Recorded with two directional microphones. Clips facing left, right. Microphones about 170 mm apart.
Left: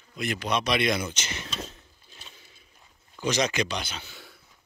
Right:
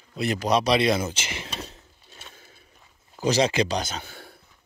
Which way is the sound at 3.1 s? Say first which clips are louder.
Right 4 dB; 35° right (ahead or behind).